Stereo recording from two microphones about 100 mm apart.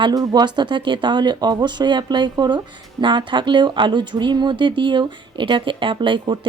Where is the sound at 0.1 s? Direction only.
40° right (ahead or behind).